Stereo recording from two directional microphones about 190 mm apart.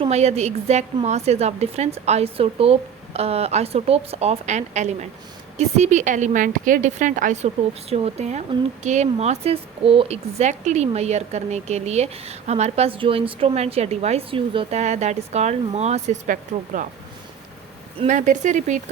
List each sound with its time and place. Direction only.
0.0 s a woman's voice: 35° right (ahead or behind)
18.0 s a woman's voice: 40° right (ahead or behind)